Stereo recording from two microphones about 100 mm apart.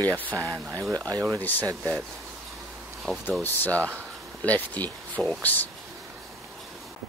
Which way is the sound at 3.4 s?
15° left (ahead or behind).